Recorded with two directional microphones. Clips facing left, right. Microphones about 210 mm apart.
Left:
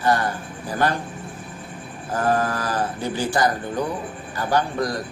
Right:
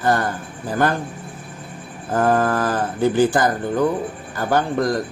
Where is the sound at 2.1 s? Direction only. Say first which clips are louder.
Right 4 dB; 55° right (ahead or behind).